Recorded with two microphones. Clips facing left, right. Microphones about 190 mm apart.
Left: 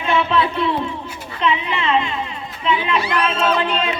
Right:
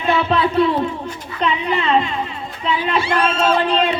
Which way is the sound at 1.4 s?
40° right (ahead or behind).